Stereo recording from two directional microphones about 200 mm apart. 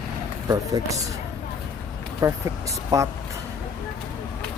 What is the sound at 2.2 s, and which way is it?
Speech, 15° right (ahead or behind).